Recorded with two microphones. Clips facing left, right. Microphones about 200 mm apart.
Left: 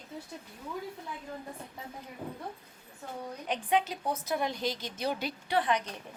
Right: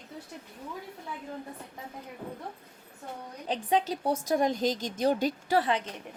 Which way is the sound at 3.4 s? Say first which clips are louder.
Right 2 dB; 35° right (ahead or behind).